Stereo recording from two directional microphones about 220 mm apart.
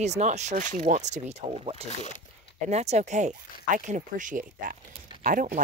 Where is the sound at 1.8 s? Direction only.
35° left (ahead or behind).